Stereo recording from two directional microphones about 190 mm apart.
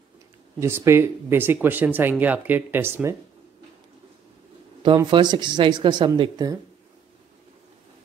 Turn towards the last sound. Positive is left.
turn(degrees=-20)  # may be behind; listen again after turning